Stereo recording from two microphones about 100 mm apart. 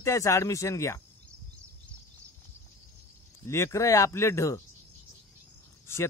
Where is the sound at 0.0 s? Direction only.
30° left (ahead or behind).